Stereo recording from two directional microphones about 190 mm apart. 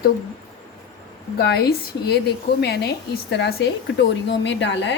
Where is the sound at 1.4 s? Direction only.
55° left (ahead or behind).